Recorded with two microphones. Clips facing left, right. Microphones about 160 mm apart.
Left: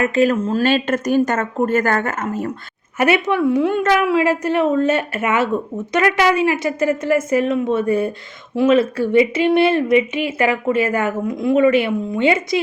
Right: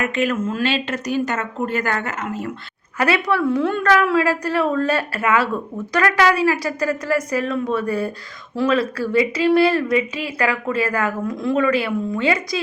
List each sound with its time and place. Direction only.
0.0 s speech: 35° left (ahead or behind)
3.0 s a woman's voice: 25° left (ahead or behind)